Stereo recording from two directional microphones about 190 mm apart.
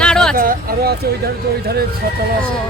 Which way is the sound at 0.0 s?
5° left (ahead or behind).